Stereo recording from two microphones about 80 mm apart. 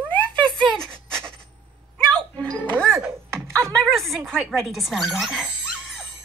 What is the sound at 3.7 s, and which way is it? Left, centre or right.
A woman's voice, centre.